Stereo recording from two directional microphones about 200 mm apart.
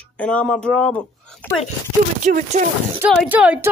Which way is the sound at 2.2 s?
40° right (ahead or behind).